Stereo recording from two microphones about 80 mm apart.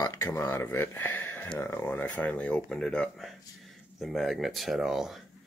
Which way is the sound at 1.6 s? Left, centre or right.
Left.